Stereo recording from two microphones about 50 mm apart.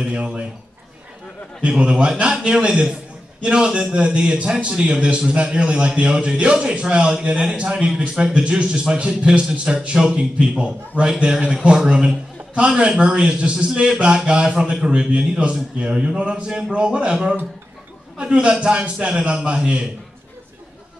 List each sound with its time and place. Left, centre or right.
0.0 s a man's voice: centre
1.6 s a man's voice: centre
9.8 s a man's voice: centre
10.1 s a man's voice: right
12.5 s a man's voice: right